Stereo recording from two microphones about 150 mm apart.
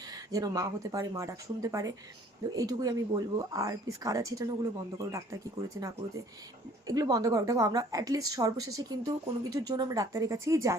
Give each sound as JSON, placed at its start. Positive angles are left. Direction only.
{"t": 0.1, "sound": "a woman's voice", "side_deg": -25}
{"t": 6.8, "sound": "a woman's voice", "side_deg": -25}